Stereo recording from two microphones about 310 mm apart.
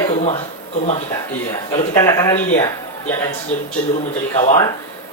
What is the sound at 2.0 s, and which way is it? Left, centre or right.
Speech, centre.